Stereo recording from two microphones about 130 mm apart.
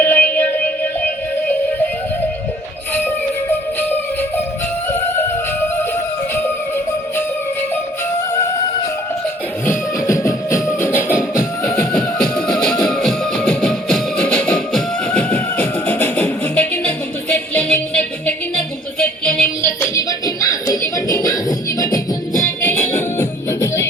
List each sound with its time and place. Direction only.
0.0 s music: 15° left (ahead or behind)
3.8 s music: 15° left (ahead or behind)
9.6 s music: 25° left (ahead or behind)
11.9 s music: 5° left (ahead or behind)
19.8 s music: 25° left (ahead or behind)